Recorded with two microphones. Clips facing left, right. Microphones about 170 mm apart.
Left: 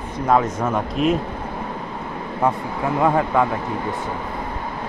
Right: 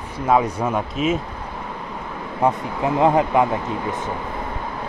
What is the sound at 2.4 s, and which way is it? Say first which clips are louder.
Speech: right 1 dB; 20° right (ahead or behind).